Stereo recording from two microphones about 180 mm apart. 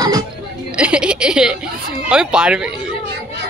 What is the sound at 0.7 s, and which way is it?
A woman's voice, 5° right (ahead or behind).